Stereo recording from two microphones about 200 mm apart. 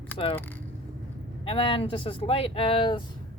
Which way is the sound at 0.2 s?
30° left (ahead or behind).